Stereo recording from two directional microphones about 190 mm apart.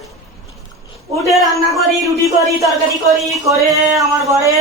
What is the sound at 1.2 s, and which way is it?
Speech, centre (ahead or behind).